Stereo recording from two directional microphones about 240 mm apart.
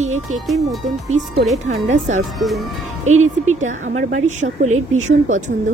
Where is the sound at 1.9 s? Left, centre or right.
Right.